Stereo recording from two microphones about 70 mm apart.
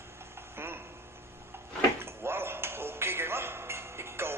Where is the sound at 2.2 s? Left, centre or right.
Right.